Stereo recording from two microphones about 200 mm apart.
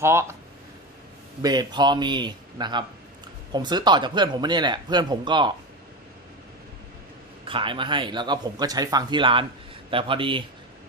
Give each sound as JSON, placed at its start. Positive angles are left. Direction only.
{"t": 0.0, "sound": "speech", "side_deg": -15}
{"t": 1.4, "sound": "speech", "side_deg": -20}
{"t": 7.4, "sound": "speech", "side_deg": -25}